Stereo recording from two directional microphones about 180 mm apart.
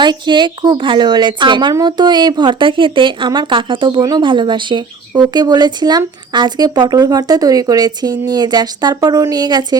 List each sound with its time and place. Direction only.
0.0 s a woman's voice: 25° right (ahead or behind)